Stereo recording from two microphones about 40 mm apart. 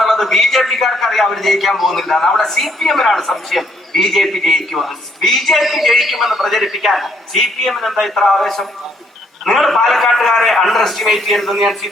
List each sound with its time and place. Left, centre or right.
0.0 s a man's voice: centre